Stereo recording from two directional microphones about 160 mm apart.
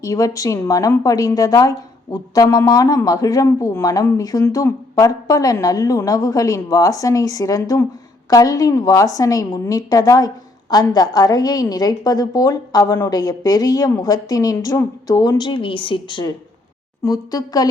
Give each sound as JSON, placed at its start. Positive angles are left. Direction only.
{"t": 0.0, "sound": "a woman's voice", "side_deg": 20}